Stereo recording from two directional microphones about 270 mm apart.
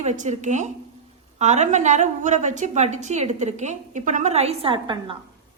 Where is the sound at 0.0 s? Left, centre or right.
Right.